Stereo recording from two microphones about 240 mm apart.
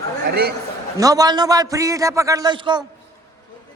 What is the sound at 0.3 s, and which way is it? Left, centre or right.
Speech, right.